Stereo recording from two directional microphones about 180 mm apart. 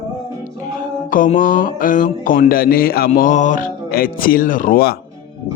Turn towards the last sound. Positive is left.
turn(degrees=60)  # may be behind; listen again after turning